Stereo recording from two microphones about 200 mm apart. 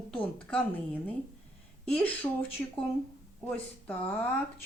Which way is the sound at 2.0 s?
10° left (ahead or behind).